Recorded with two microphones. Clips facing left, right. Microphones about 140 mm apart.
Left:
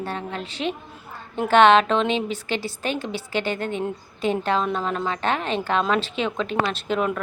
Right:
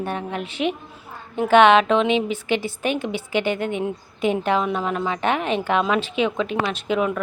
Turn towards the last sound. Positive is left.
turn(degrees=-5)  # may be behind; listen again after turning